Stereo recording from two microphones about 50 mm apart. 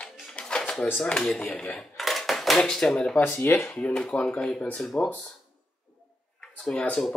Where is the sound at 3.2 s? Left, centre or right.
Left.